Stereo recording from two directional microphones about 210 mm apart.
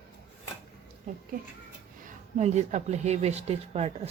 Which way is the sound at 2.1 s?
35° right (ahead or behind).